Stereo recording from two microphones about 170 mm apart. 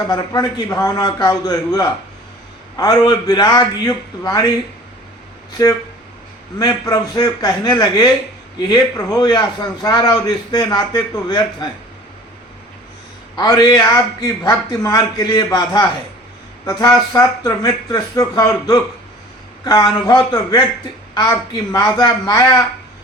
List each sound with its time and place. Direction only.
0.1 s a man's voice: 20° left (ahead or behind)
5.6 s a man's voice: 25° left (ahead or behind)
13.3 s a man's voice: 25° left (ahead or behind)